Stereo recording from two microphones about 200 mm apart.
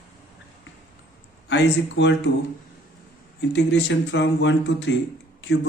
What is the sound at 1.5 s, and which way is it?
Speech, 65° left (ahead or behind).